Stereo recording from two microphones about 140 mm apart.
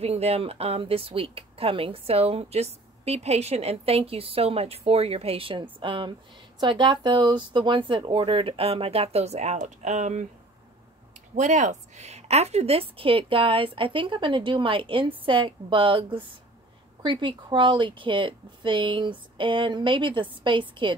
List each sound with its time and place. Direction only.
0.0 s speech: 45° right (ahead or behind)
11.3 s speech: 60° right (ahead or behind); by 20.9 s 35° right (ahead or behind)